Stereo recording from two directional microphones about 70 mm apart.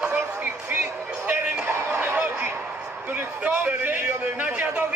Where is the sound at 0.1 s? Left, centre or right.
Right.